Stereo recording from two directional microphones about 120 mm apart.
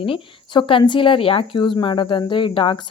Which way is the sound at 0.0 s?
45° left (ahead or behind).